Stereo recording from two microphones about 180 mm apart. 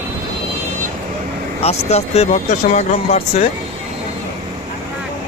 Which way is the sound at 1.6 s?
35° left (ahead or behind).